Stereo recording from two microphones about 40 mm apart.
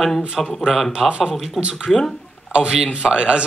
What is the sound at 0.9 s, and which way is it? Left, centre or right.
Speech, right.